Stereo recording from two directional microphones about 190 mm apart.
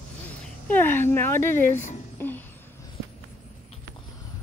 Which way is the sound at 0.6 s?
10° left (ahead or behind).